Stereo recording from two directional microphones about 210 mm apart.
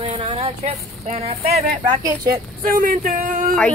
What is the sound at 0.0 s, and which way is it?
Speech, 25° right (ahead or behind).